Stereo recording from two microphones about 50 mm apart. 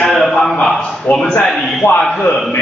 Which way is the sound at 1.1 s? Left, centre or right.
Left.